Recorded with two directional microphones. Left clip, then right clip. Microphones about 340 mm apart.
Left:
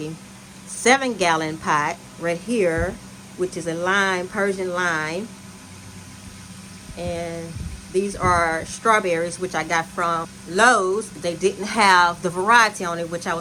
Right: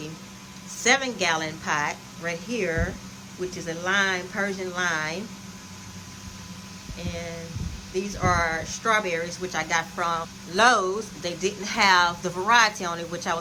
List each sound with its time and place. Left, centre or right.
0.8 s speech: centre
7.0 s speech: centre